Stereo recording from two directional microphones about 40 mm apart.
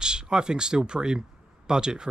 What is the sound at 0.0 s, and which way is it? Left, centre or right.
Speech, right.